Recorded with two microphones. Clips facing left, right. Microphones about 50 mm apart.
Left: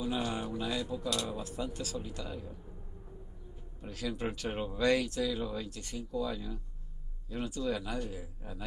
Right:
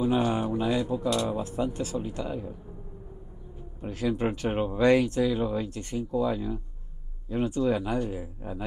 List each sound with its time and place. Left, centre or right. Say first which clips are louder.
0.0 s speech: right 9 dB; right
3.8 s speech: right 9 dB; right